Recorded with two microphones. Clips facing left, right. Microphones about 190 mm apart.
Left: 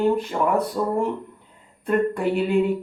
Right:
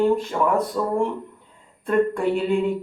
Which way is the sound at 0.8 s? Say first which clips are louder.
Even; 20° left (ahead or behind).